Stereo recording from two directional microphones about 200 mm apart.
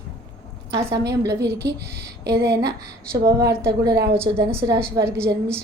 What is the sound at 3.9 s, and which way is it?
Speech, 55° right (ahead or behind).